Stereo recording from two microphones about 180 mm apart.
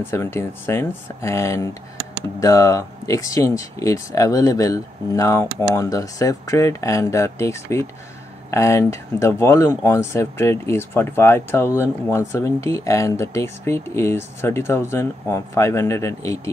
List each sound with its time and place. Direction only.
0.0 s speech: 15° left (ahead or behind)